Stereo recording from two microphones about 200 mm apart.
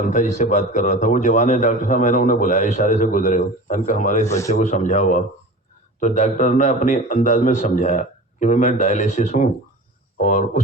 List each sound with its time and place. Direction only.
0.1 s a man's voice: 35° left (ahead or behind)
4.3 s a man's voice: 15° left (ahead or behind)
4.5 s a man's voice: 40° left (ahead or behind)